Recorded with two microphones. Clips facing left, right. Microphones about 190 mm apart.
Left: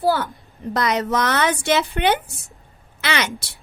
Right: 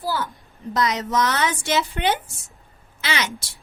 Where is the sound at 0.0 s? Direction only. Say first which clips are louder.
Left 7 dB; 60° left (ahead or behind).